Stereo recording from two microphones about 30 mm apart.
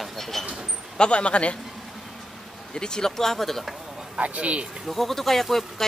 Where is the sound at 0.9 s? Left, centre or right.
Left.